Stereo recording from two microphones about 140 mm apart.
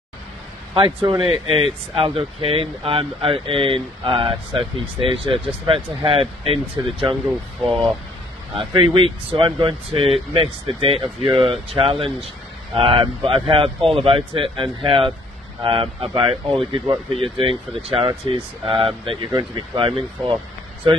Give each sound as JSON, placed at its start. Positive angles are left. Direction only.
{"t": 0.7, "sound": "speech", "side_deg": -35}
{"t": 8.5, "sound": "speech", "side_deg": -35}